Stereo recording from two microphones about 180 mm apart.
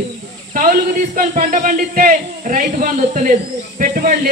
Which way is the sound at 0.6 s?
50° right (ahead or behind).